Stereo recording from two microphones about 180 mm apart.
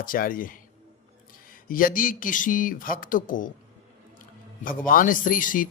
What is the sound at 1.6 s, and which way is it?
A man's voice, 50° left (ahead or behind).